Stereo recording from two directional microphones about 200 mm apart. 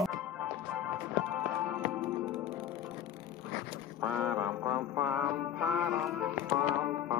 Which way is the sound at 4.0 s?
5° right (ahead or behind).